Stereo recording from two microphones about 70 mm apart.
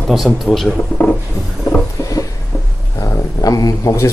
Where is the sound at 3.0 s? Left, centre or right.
Left.